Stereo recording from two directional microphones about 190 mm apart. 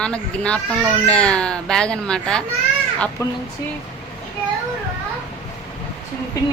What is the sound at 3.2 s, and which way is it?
Speech, 15° left (ahead or behind).